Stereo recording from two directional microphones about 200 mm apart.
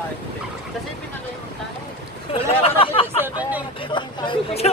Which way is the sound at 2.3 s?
25° left (ahead or behind).